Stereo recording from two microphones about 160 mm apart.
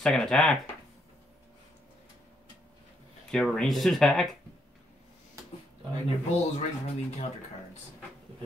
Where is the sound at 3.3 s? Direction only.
5° left (ahead or behind).